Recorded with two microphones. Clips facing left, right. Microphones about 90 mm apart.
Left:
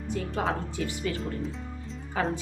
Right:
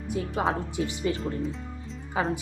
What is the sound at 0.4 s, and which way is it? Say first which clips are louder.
Speech: right 3 dB; 15° right (ahead or behind).